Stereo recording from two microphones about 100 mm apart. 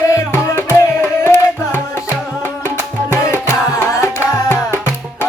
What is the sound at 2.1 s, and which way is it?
Music, centre (ahead or behind).